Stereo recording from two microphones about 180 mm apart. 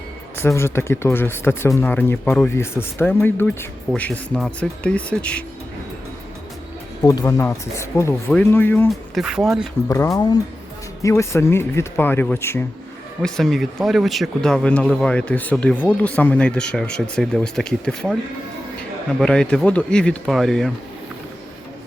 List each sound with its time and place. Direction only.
0.3 s speech: 15° left (ahead or behind)
7.0 s speech: 20° left (ahead or behind)
8.9 s speech: centre (ahead or behind)
9.9 s speech: 20° left (ahead or behind)
13.2 s speech: centre (ahead or behind)
19.2 s speech: 5° left (ahead or behind)